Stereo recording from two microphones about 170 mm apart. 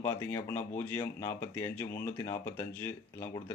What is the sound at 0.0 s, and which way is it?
Speech, 15° left (ahead or behind).